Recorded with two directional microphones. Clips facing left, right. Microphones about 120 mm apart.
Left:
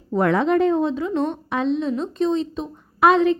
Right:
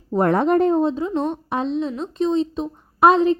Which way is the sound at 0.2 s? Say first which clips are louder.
Right 1 dB; 45° right (ahead or behind).